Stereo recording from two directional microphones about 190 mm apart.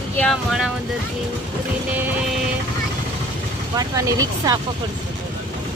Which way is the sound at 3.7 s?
20° right (ahead or behind).